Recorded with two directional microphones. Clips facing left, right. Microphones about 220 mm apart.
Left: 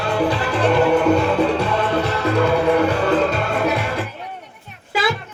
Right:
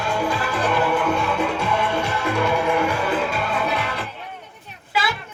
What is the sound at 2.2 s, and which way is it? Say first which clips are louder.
Music: left 5 dB; 35° left (ahead or behind).